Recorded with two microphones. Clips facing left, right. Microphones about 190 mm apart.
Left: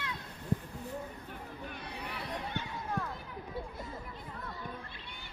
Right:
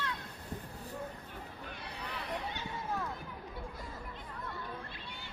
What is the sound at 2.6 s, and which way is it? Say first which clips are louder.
Run: left 3 dB; 55° left (ahead or behind).